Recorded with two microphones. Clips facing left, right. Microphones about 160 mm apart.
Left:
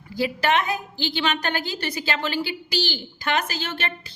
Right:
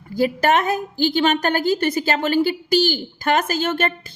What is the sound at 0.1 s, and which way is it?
A woman's voice, 45° right (ahead or behind).